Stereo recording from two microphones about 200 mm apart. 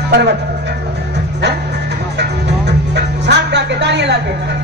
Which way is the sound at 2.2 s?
55° right (ahead or behind).